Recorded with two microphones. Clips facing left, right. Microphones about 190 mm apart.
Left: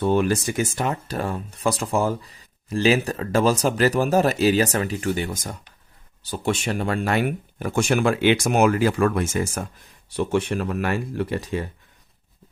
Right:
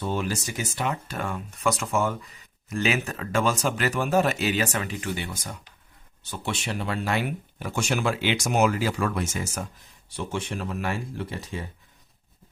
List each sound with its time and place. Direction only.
0.0 s speech: 60° left (ahead or behind)